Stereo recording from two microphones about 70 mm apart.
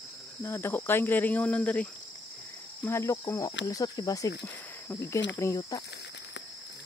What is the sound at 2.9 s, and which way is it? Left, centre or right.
Speech, left.